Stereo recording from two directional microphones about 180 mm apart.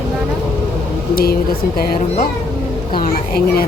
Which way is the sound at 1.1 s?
55° left (ahead or behind).